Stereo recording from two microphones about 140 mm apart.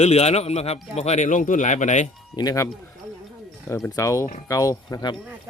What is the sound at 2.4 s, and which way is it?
Speech, 30° left (ahead or behind).